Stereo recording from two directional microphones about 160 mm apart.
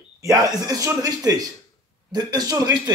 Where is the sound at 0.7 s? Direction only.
20° right (ahead or behind).